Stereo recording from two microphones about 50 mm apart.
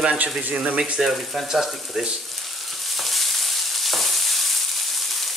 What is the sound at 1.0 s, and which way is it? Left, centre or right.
Speech, centre.